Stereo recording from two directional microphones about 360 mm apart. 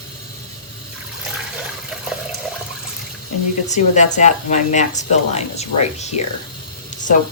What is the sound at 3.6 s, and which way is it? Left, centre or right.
Speech, centre.